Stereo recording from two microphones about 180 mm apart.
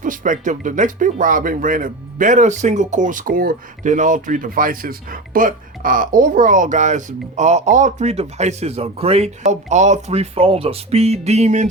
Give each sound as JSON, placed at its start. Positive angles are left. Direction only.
{"t": 0.0, "sound": "speech", "side_deg": -45}